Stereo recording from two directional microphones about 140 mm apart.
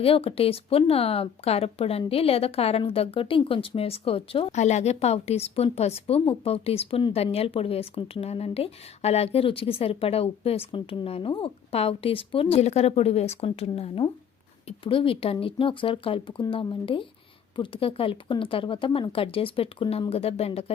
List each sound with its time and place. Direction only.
0.0 s speech: 40° left (ahead or behind)